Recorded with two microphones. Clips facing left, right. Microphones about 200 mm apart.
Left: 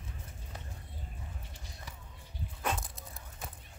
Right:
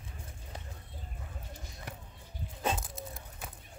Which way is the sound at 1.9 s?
60° right (ahead or behind).